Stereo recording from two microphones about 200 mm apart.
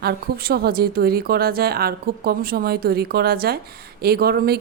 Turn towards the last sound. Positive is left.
turn(degrees=-50)  # may be behind; listen again after turning